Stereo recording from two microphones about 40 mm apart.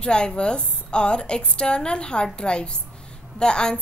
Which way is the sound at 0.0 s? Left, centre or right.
Left.